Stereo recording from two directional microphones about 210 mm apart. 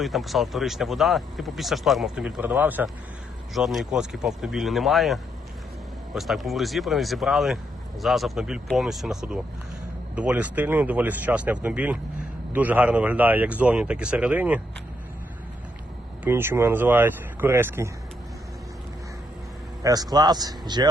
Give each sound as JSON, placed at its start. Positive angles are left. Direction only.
{"t": 0.0, "sound": "speech", "side_deg": 0}
{"t": 16.2, "sound": "speech", "side_deg": -10}
{"t": 19.8, "sound": "a man's voice", "side_deg": -20}